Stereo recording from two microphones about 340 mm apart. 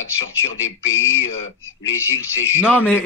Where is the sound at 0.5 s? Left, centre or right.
Left.